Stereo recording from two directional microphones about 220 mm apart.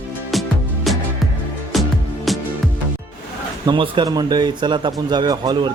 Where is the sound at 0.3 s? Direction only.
Centre (ahead or behind).